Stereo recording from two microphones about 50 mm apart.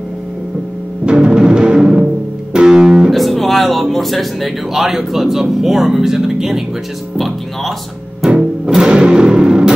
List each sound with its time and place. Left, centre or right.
1.0 s timpani: centre
2.5 s music: centre
3.1 s speech: centre
8.3 s music: centre